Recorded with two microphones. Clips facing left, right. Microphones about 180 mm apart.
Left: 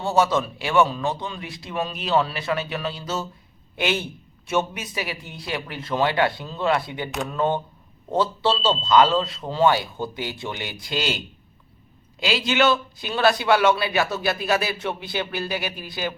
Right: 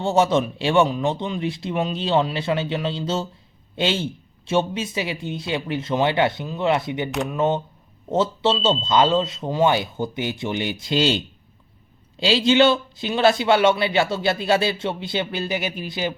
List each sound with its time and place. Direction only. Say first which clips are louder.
0.0 s a man's voice: right 2 dB; 25° right (ahead or behind)
12.2 s a man's voice: right 5 dB; 25° right (ahead or behind)